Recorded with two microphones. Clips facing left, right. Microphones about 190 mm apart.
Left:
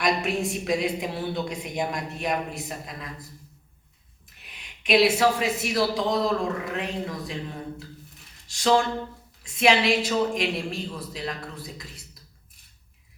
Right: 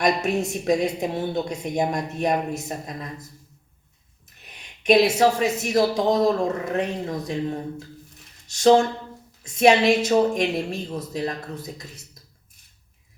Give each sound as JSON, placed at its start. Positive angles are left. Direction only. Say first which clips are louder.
{"t": 0.0, "sound": "a woman's voice", "louder": "right 3 dB", "side_deg": -45}
{"t": 4.4, "sound": "a woman's voice", "louder": "right 9 dB", "side_deg": -45}